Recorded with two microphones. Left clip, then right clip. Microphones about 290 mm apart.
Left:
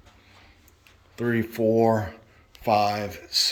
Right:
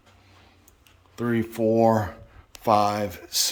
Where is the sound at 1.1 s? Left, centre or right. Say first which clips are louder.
Even; centre.